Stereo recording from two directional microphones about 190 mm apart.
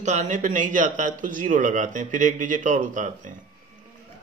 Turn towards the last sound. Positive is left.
turn(degrees=-40)  # may be behind; listen again after turning